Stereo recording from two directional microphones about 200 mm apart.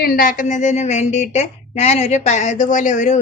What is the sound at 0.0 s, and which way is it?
A woman's voice, 45° left (ahead or behind).